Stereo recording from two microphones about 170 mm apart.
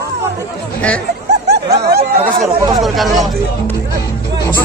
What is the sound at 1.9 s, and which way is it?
Speech, 70° right (ahead or behind).